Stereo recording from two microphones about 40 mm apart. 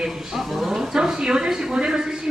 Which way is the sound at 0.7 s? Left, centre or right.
Centre.